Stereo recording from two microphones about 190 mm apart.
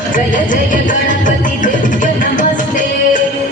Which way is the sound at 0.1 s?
45° left (ahead or behind).